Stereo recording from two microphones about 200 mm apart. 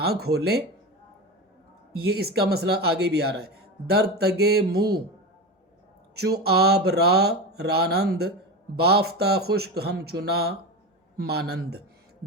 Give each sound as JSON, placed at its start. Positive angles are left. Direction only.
{"t": 0.0, "sound": "speech", "side_deg": -50}
{"t": 2.0, "sound": "speech", "side_deg": -50}
{"t": 6.1, "sound": "speech", "side_deg": -55}